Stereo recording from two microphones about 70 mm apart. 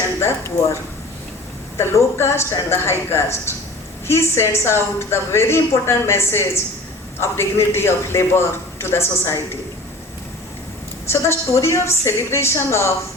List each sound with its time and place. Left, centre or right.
0.2 s speech: left
2.0 s a woman's voice: left
11.1 s a woman's voice: left